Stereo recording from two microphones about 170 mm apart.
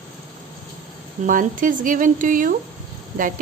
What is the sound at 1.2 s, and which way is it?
A woman's voice, 50° right (ahead or behind).